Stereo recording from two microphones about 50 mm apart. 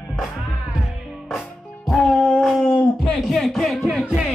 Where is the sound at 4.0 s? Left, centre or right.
Centre.